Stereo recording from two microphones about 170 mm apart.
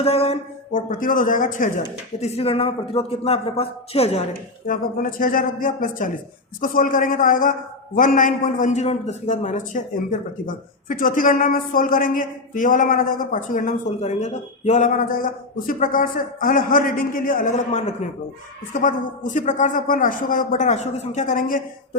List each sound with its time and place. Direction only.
0.0 s speech: 35° left (ahead or behind)
0.7 s a woman's voice: 55° left (ahead or behind)
2.2 s speech: 35° left (ahead or behind)
4.6 s a woman's voice: 55° left (ahead or behind)